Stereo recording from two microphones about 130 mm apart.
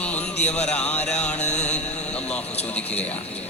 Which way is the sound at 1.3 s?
60° left (ahead or behind).